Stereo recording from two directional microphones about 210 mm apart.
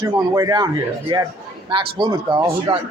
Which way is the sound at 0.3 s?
20° right (ahead or behind).